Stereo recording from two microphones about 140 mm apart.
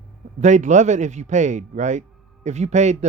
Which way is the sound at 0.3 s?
60° right (ahead or behind).